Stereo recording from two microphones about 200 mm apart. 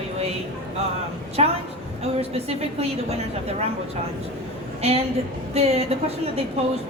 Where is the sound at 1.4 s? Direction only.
30° right (ahead or behind).